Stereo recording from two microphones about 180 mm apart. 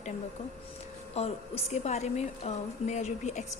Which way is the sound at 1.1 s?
35° left (ahead or behind).